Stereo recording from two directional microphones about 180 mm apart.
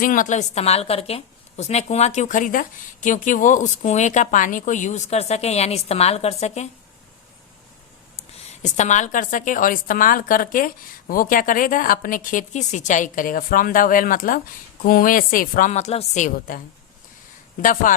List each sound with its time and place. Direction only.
0.0 s a woman's voice: 50° left (ahead or behind)
8.1 s a woman's voice: 40° left (ahead or behind)
17.6 s speech: 50° left (ahead or behind)